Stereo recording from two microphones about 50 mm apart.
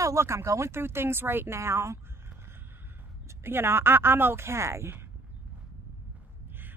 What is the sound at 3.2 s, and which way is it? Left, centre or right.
Speech, right.